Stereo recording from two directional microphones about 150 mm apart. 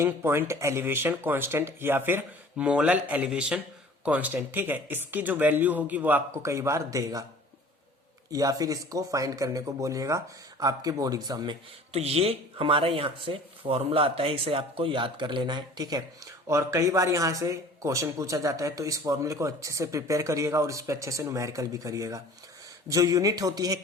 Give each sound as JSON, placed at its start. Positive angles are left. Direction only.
{"t": 0.0, "sound": "speech", "side_deg": -15}
{"t": 8.3, "sound": "speech", "side_deg": -25}
{"t": 11.9, "sound": "speech", "side_deg": -45}